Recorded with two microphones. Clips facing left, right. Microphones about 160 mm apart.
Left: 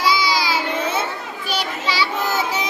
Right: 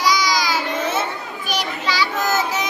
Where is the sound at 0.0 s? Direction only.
25° left (ahead or behind).